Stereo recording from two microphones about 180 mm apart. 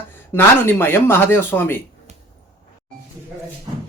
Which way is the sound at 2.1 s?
35° right (ahead or behind).